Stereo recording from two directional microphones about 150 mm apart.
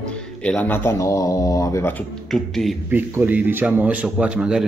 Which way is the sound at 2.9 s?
15° right (ahead or behind).